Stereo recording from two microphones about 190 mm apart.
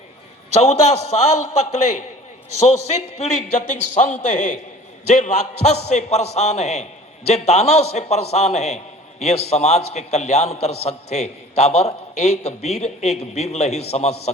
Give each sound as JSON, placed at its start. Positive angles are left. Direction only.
{"t": 0.5, "sound": "a man's voice", "side_deg": 35}